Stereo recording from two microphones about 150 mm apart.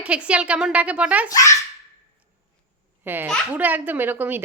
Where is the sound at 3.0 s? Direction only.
15° right (ahead or behind).